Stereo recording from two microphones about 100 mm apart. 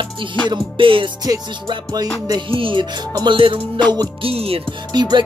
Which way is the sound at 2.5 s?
60° right (ahead or behind).